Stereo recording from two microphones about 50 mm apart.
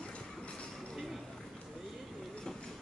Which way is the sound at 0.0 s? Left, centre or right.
Left.